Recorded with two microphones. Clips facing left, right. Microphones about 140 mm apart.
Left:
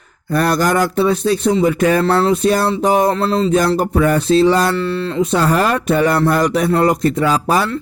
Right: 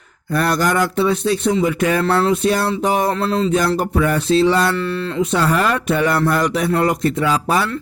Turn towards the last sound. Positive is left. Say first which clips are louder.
# left 2 dB
turn(degrees=40)  # may be behind; listen again after turning